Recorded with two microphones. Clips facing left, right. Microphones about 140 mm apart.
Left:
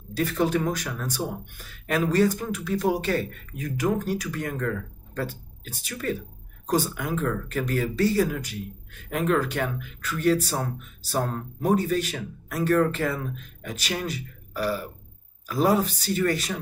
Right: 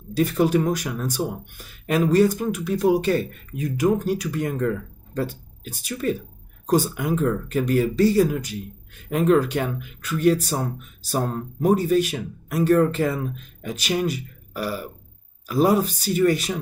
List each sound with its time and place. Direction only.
0.1 s speech: 15° right (ahead or behind)
11.9 s speech: 15° right (ahead or behind)